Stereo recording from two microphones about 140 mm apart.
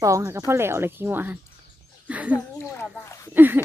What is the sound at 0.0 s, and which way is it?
A woman's voice, 20° right (ahead or behind).